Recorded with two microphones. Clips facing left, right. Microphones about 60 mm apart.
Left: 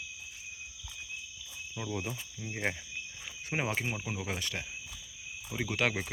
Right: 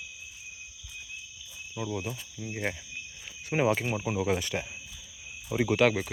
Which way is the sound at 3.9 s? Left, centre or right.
Centre.